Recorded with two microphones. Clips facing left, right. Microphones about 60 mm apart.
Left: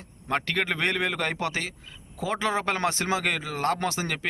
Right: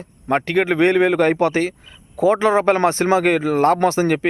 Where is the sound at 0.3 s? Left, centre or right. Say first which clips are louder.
Right 9 dB; right.